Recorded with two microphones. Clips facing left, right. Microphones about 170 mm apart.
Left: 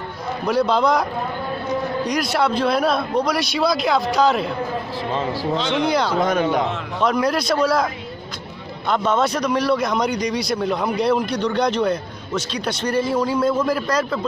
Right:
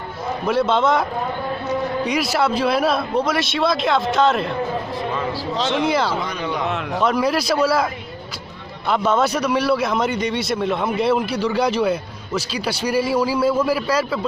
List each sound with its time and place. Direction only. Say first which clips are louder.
0.5 s speech: even; centre (ahead or behind)
2.0 s speech: even; 5° right (ahead or behind)
5.7 s speech: right 1 dB; 5° right (ahead or behind)
6.1 s speech: left 6 dB; 45° left (ahead or behind)
7.0 s a man's voice: even; 5° right (ahead or behind)